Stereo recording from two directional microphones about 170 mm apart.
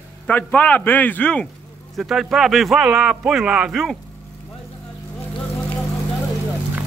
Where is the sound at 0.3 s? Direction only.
10° left (ahead or behind).